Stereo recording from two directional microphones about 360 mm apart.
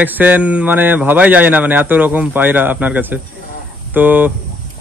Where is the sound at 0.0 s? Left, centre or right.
Centre.